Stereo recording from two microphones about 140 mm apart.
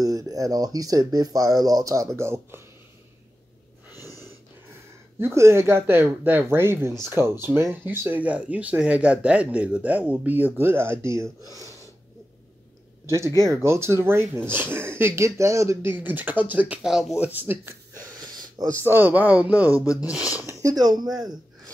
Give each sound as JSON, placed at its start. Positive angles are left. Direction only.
{"t": 0.0, "sound": "speech", "side_deg": -25}
{"t": 4.0, "sound": "snort", "side_deg": 25}
{"t": 5.2, "sound": "speech", "side_deg": -20}
{"t": 13.0, "sound": "speech", "side_deg": -20}
{"t": 19.8, "sound": "speech", "side_deg": 25}
{"t": 20.6, "sound": "speech", "side_deg": -30}
{"t": 21.2, "sound": "a sound", "side_deg": -30}